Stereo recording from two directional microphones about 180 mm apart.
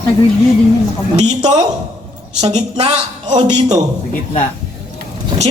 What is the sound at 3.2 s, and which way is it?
Speech, 25° right (ahead or behind).